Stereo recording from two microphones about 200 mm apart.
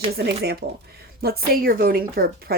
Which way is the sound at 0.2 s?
55° right (ahead or behind).